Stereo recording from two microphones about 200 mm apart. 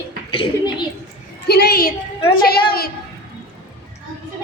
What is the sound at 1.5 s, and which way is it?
A woman's voice, 55° left (ahead or behind).